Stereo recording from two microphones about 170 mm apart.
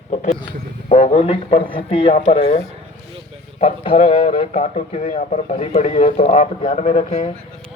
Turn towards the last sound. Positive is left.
turn(degrees=40)  # may be behind; listen again after turning